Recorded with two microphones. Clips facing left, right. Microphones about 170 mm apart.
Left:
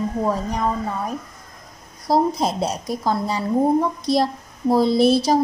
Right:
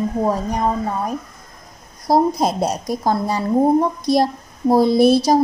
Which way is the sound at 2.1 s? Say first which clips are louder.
Right 3 dB; 40° right (ahead or behind).